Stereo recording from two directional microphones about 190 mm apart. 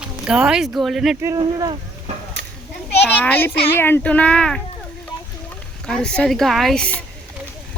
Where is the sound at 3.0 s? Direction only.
10° left (ahead or behind).